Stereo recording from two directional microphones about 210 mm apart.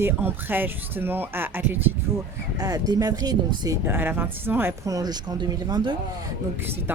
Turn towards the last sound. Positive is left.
turn(degrees=-10)  # may be behind; listen again after turning